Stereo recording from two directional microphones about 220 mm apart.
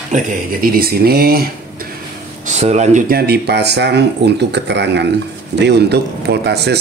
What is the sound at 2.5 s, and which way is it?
Speech, 30° right (ahead or behind).